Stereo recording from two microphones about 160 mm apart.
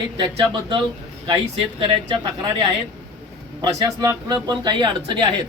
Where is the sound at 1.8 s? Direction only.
30° right (ahead or behind).